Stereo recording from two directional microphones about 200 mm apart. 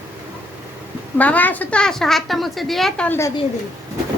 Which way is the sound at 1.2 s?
10° left (ahead or behind).